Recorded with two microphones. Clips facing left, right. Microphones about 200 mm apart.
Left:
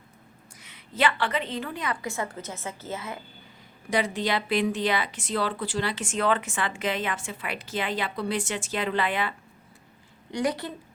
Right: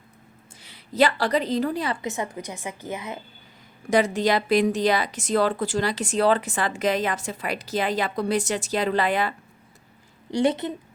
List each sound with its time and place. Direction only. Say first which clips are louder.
0.6 s a woman's voice: right 5 dB; 35° right (ahead or behind); by 3.2 s 15° right (ahead or behind)
3.8 s a woman's voice: right 6 dB; 45° right (ahead or behind)
10.3 s a woman's voice: right 5 dB; 25° right (ahead or behind)